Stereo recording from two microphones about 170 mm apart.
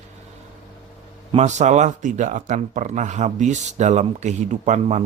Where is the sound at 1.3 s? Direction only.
40° right (ahead or behind).